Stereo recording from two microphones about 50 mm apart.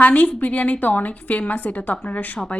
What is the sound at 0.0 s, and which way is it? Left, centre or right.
A woman's voice, left.